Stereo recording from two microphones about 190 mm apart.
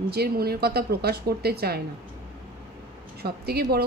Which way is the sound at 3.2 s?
55° right (ahead or behind).